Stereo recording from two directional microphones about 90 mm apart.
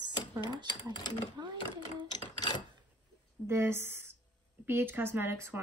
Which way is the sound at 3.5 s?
30° right (ahead or behind).